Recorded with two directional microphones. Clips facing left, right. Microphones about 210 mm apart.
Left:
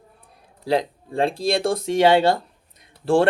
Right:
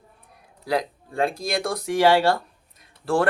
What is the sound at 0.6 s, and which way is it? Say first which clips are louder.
Speech: left 3 dB; 25° left (ahead or behind).